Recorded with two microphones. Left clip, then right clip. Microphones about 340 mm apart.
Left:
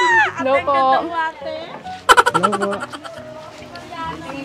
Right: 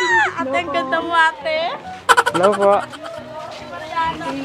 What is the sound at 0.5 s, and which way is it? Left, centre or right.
Speech, left.